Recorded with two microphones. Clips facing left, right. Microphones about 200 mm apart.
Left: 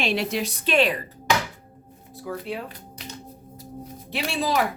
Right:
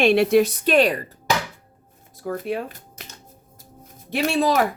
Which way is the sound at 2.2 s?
50° right (ahead or behind).